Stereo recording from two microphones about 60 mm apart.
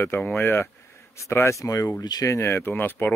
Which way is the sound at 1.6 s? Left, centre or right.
Left.